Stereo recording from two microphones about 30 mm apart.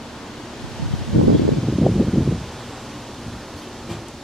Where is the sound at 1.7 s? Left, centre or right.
Centre.